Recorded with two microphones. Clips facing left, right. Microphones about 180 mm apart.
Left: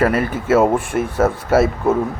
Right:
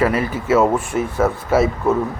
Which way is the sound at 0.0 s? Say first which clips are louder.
Left 1 dB; 55° left (ahead or behind).